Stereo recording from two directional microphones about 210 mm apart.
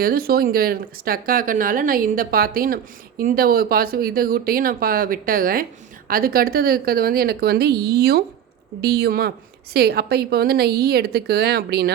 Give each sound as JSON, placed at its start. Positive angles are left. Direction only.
{"t": 0.0, "sound": "speech", "side_deg": -45}